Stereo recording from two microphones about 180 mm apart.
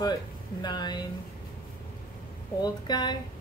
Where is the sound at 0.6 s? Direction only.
25° left (ahead or behind).